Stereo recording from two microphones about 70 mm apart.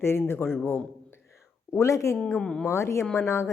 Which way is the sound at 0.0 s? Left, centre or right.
Left.